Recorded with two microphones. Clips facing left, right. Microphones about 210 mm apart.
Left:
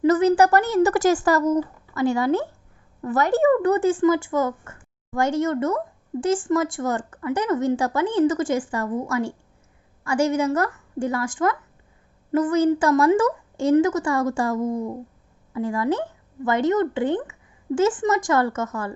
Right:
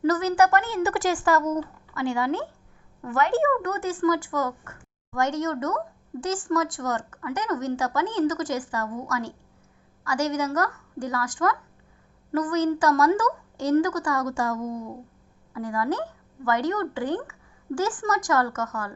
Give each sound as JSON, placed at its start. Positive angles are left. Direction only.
{"t": 0.0, "sound": "a woman's voice", "side_deg": 25}